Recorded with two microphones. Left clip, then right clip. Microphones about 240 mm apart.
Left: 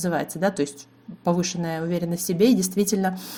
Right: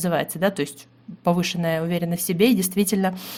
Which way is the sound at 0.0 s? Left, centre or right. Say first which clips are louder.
Right 2 dB; right.